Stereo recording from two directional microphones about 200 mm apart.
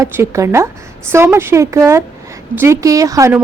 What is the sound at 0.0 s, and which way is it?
A woman's voice, 15° right (ahead or behind).